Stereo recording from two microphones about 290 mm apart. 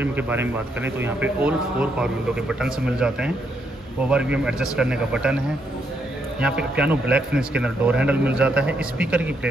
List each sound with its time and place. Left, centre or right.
0.0 s a man's voice: centre
6.4 s a man's voice: centre